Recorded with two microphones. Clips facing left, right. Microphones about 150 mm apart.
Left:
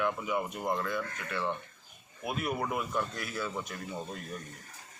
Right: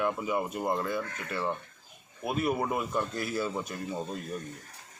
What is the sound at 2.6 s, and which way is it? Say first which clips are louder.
Speech: right 2 dB; 30° right (ahead or behind).